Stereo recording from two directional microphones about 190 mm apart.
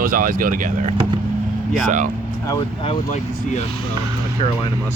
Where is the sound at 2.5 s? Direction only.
25° left (ahead or behind).